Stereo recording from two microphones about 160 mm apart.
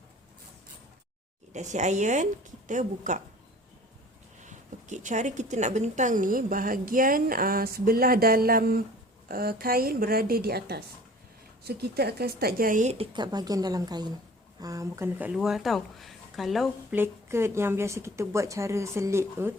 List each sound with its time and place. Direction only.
1.5 s speech: 45° right (ahead or behind)
4.4 s a woman's voice: 50° right (ahead or behind); by 10.8 s 75° right (ahead or behind)
11.6 s a woman's voice: 90° right; by 13.1 s 45° right (ahead or behind)
13.1 s speech: 25° right (ahead or behind); by 16.6 s centre (ahead or behind)
16.9 s speech: 15° right (ahead or behind)